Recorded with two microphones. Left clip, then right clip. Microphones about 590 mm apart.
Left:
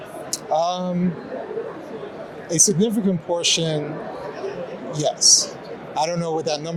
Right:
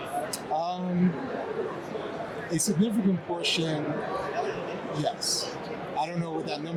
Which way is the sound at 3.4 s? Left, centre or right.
Left.